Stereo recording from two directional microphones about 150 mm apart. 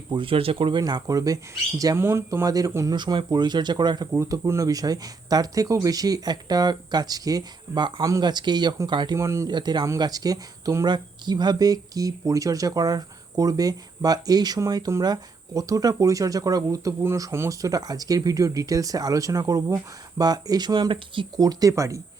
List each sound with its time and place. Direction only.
0.1 s speech: 35° right (ahead or behind)
4.1 s speech: 20° right (ahead or behind)